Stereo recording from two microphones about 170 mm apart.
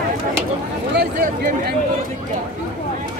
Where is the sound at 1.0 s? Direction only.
65° right (ahead or behind).